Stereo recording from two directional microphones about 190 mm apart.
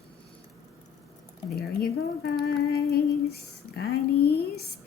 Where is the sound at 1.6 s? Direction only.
55° left (ahead or behind).